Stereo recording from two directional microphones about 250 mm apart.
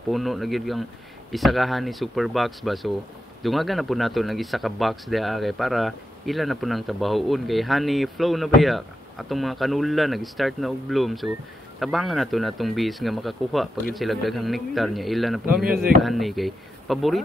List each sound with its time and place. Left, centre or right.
0.1 s speech: centre
15.7 s speech: right
16.0 s speech: centre